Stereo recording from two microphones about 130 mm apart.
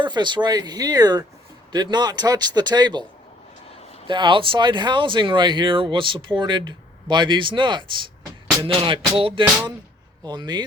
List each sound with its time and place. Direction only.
0.0 s speech: 35° right (ahead or behind)
4.0 s speech: 40° right (ahead or behind)
8.6 s music: 40° right (ahead or behind)
10.2 s speech: 35° right (ahead or behind)